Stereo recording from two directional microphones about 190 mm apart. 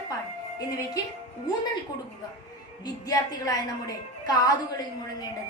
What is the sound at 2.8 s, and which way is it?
A woman's voice, 20° left (ahead or behind).